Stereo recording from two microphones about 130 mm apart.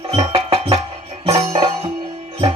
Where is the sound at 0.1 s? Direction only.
40° right (ahead or behind).